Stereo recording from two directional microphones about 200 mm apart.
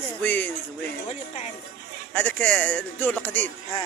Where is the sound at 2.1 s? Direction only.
10° left (ahead or behind).